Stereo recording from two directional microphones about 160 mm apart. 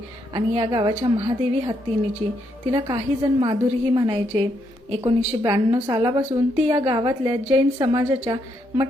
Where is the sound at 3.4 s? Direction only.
25° right (ahead or behind).